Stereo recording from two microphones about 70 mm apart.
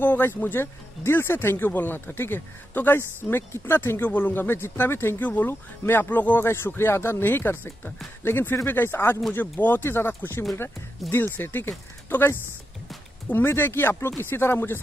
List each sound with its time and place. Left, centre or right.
0.0 s speech: left
6.4 s speech: left